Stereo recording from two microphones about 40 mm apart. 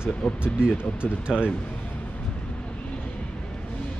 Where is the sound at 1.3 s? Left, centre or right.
Centre.